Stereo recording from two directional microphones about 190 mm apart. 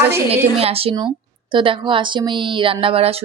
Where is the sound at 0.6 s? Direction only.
30° right (ahead or behind).